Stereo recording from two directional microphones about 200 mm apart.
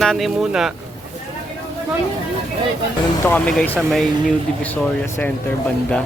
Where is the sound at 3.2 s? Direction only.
5° left (ahead or behind).